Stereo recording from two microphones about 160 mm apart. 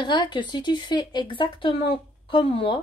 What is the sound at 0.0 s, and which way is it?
Speech, 30° left (ahead or behind).